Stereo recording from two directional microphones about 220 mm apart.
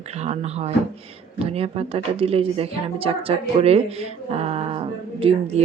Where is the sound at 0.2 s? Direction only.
30° right (ahead or behind).